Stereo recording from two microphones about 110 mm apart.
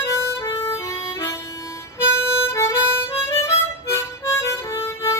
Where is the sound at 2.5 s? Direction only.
25° left (ahead or behind).